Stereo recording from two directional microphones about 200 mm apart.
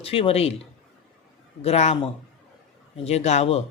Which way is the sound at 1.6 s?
30° left (ahead or behind).